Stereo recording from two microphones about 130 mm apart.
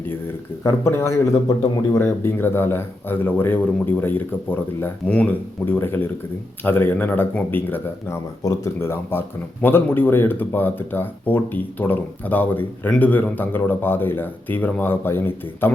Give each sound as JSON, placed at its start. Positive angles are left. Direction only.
{"t": 0.6, "sound": "speech", "side_deg": 20}
{"t": 2.0, "sound": "speech", "side_deg": 15}